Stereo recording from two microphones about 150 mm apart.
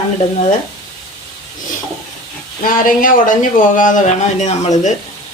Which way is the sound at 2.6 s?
65° left (ahead or behind).